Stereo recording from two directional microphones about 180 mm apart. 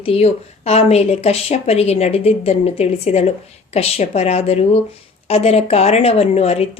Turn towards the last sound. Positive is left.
turn(degrees=35)  # may be behind; listen again after turning